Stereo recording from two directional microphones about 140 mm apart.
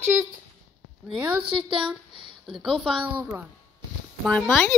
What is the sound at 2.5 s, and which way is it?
A woman's voice, centre (ahead or behind).